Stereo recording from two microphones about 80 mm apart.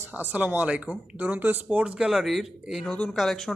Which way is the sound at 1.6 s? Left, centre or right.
Centre.